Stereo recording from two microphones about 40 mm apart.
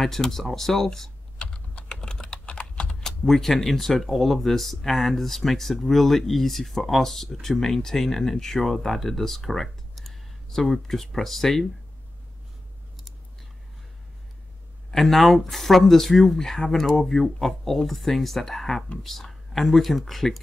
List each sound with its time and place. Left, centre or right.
0.0 s speech: centre
1.4 s typing: left
3.3 s speech: centre
14.9 s speech: centre